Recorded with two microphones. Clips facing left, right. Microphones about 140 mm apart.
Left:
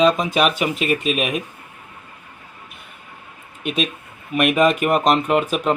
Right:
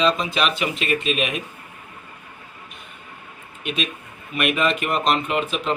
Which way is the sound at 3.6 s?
45° left (ahead or behind).